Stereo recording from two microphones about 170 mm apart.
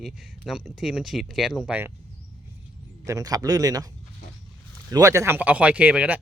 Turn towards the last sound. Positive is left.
turn(degrees=-10)  # may be behind; listen again after turning